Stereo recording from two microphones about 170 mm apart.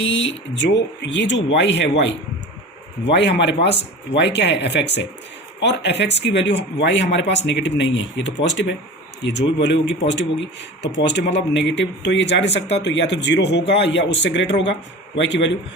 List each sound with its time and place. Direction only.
0.0 s speech: 90° left